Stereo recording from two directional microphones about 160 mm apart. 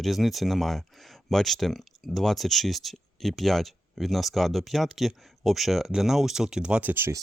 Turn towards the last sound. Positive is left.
turn(degrees=-15)  # may be behind; listen again after turning